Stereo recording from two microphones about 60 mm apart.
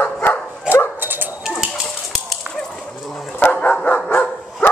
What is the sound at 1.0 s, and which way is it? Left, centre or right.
Dog, right.